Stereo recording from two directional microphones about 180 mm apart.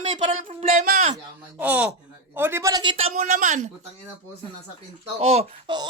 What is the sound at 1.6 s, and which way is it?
A woman's voice, 10° right (ahead or behind).